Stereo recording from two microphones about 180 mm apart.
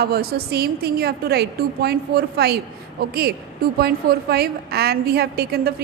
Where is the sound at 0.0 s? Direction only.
60° right (ahead or behind).